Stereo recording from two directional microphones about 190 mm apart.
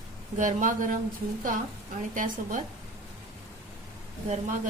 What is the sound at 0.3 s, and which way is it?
Speech, 45° right (ahead or behind).